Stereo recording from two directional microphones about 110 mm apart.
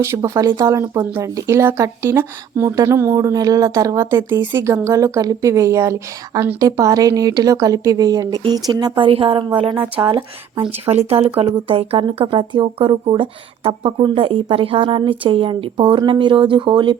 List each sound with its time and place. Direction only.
0.0 s speech: 30° right (ahead or behind)
9.0 s speech: 55° right (ahead or behind)
9.7 s speech: 15° right (ahead or behind)
10.0 s speech: 50° right (ahead or behind)
10.8 s speech: 65° right (ahead or behind)
12.2 s speech: 45° right (ahead or behind)